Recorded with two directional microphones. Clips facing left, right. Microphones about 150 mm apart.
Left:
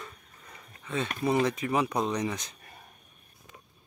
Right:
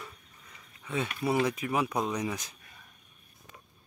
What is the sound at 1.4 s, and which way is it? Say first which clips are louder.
Speech: left 2 dB; 5° right (ahead or behind).